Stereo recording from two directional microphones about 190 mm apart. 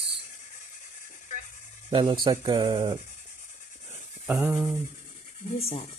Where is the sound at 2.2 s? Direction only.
25° right (ahead or behind).